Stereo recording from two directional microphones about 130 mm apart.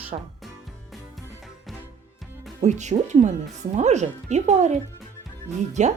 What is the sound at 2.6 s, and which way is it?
Speech, 65° right (ahead or behind).